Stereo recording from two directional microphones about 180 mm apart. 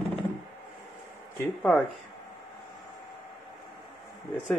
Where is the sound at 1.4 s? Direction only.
10° left (ahead or behind).